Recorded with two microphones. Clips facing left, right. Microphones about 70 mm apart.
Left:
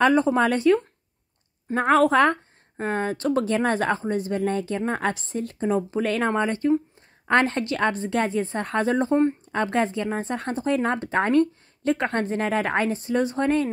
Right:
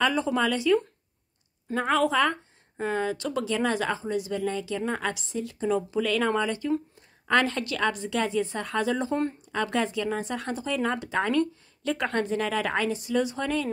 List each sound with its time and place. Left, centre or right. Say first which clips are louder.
0.0 s speech: left 6 dB; left
1.8 s speech: left 6 dB; left